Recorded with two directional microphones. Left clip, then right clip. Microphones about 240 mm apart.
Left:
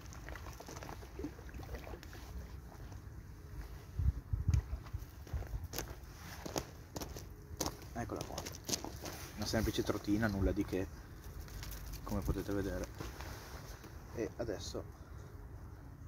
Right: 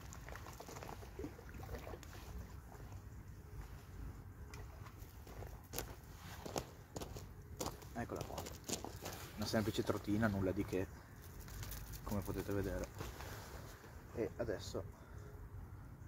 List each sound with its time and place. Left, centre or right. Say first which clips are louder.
0.7 s boat: left 2 dB; centre
5.7 s a sound: left 3 dB; centre
12.1 s speech: left 3 dB; centre
14.1 s speech: left 1 dB; centre